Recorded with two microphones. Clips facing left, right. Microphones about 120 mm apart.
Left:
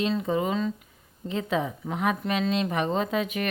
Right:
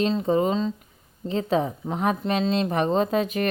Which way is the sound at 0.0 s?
30° right (ahead or behind).